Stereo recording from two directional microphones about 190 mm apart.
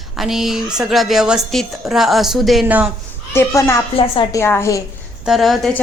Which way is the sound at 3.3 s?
10° left (ahead or behind).